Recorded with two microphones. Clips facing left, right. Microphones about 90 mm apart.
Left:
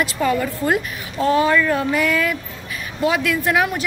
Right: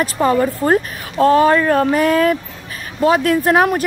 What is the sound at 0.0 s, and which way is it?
A woman's voice, 35° right (ahead or behind).